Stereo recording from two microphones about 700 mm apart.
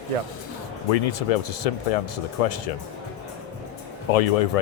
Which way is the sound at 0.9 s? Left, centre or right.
Left.